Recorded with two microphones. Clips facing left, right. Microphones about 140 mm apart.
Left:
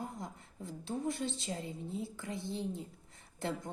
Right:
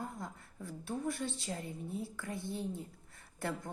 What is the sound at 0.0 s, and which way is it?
A woman's voice, 20° left (ahead or behind).